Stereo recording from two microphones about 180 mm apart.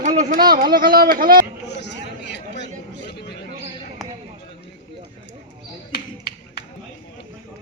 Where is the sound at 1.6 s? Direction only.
70° left (ahead or behind).